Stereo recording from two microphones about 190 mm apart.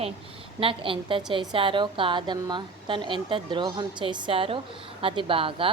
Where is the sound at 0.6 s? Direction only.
25° right (ahead or behind).